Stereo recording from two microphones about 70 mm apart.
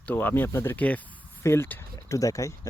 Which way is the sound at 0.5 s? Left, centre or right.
Left.